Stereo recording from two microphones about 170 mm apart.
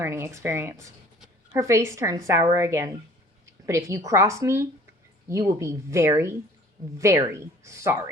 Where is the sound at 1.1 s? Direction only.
5° right (ahead or behind).